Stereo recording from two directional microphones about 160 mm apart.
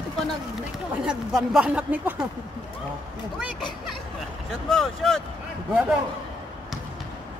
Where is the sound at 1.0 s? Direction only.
5° right (ahead or behind).